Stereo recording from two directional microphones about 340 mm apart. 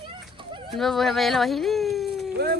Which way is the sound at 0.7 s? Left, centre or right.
Centre.